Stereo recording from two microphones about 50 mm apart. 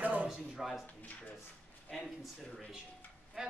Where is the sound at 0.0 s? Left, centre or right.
Right.